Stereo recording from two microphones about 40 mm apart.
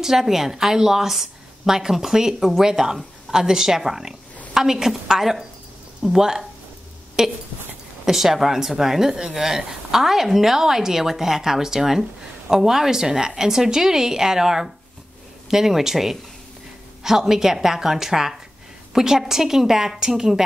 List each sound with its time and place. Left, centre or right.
0.0 s speech: centre
10.0 s speech: centre